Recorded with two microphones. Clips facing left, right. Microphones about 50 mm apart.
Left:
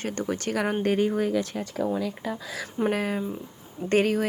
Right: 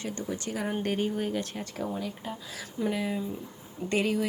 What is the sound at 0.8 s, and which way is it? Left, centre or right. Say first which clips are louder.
Speech: left 6 dB; left.